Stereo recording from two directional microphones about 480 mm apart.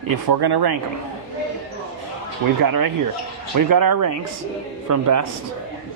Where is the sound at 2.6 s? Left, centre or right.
Right.